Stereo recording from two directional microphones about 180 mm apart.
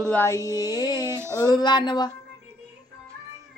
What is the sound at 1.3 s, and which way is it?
Carnatic music, 20° left (ahead or behind).